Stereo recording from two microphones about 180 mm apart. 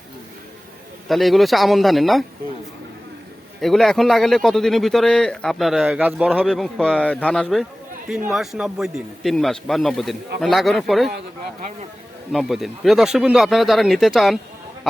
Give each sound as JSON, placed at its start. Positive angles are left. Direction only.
{"t": 1.0, "sound": "speech", "side_deg": 0}
{"t": 3.6, "sound": "speech", "side_deg": 0}
{"t": 12.3, "sound": "speech", "side_deg": 0}